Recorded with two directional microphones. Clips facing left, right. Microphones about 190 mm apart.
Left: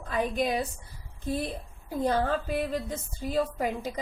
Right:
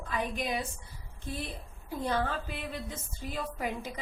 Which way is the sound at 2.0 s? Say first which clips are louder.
Left 5 dB; 40° left (ahead or behind).